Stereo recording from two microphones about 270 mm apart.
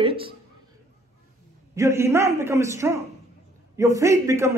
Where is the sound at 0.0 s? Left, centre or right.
Centre.